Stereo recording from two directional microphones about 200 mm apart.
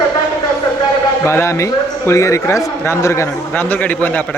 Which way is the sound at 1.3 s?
15° left (ahead or behind).